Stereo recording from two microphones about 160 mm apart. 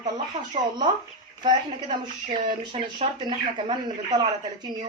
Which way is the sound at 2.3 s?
35° right (ahead or behind).